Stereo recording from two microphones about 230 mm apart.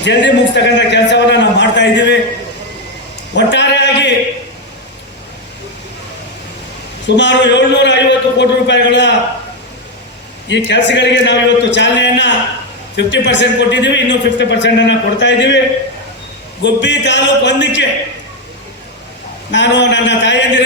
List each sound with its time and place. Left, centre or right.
0.0 s a man's voice: left
3.3 s a sound: left
7.2 s a man's voice: left
10.5 s a man's voice: left
16.6 s a man's voice: left
19.5 s a man's voice: left